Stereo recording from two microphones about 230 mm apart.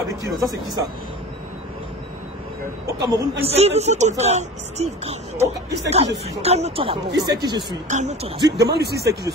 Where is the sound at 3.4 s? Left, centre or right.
Right.